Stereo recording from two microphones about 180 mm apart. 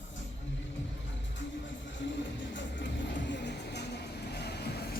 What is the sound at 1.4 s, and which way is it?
Music, 85° left.